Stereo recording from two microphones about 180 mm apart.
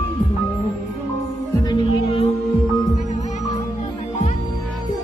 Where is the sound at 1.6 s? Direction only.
25° left (ahead or behind).